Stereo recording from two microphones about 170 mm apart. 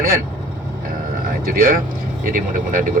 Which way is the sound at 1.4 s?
55° right (ahead or behind).